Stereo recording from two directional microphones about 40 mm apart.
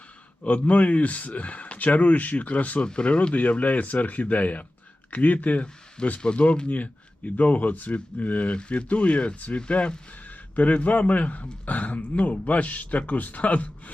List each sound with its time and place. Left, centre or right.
0.4 s speech: left
2.8 s speech: left
6.1 s speech: left
10.2 s a man's voice: left